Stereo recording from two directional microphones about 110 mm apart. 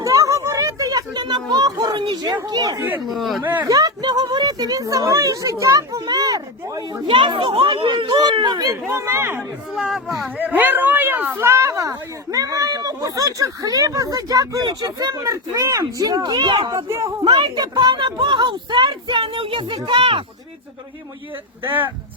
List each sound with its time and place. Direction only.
0.0 s a sound: 30° right (ahead or behind)
3.1 s speech: centre (ahead or behind)
3.6 s speech: 35° right (ahead or behind)
7.1 s a woman's voice: 50° right (ahead or behind)
8.9 s speech: 25° right (ahead or behind)
9.7 s speech: centre (ahead or behind)
10.3 s a woman's voice: 15° right (ahead or behind); by 20.2 s 50° right (ahead or behind)
21.6 s speech: 15° right (ahead or behind)